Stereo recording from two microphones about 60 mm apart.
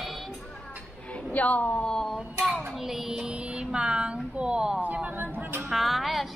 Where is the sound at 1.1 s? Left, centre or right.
Left.